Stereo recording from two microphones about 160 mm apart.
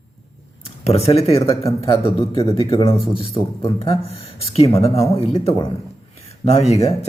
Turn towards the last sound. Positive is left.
turn(degrees=40)  # may be behind; listen again after turning